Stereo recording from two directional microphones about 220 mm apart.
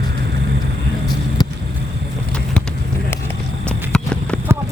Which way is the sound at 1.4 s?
15° left (ahead or behind).